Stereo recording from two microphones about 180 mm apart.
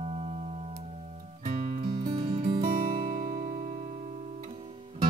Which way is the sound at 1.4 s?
45° right (ahead or behind).